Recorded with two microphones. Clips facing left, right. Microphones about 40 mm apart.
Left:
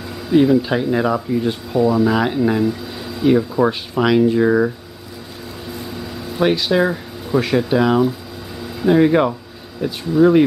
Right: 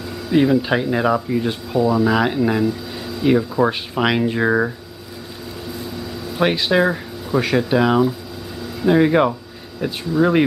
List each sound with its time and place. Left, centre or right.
0.3 s speech: centre
3.9 s speech: centre
6.4 s speech: centre